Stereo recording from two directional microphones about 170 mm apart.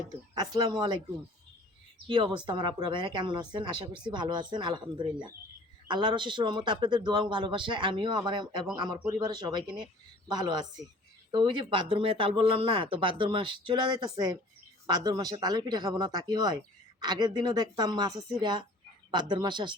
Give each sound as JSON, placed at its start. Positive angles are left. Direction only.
{"t": 0.3, "sound": "speech", "side_deg": -25}
{"t": 2.0, "sound": "speech", "side_deg": -30}